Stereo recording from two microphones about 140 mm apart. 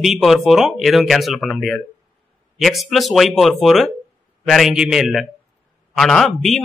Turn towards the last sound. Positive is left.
turn(degrees=0)  # may be behind; listen again after turning